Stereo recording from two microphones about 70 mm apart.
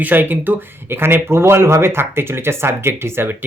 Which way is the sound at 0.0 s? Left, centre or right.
Right.